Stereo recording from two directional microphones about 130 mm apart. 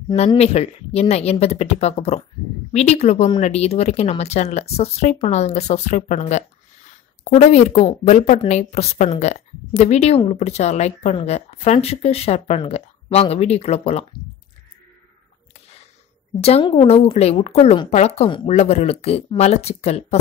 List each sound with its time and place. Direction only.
0.4 s speech: 55° left (ahead or behind)
16.3 s speech: 50° left (ahead or behind)